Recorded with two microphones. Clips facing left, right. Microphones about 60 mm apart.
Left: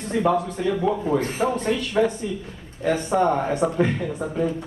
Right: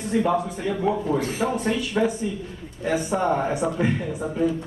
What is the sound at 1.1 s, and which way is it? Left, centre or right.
Speech, left.